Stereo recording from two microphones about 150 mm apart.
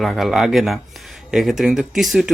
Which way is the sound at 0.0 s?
Centre (ahead or behind).